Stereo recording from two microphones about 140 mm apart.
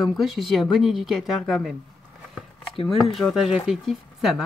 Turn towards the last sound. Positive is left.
turn(degrees=0)  # may be behind; listen again after turning